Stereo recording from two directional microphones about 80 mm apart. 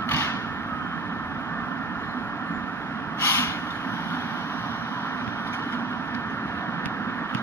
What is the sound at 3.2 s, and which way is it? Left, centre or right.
Vehicle, left.